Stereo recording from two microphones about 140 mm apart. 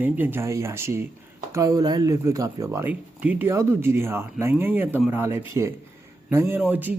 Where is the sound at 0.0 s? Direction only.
15° right (ahead or behind).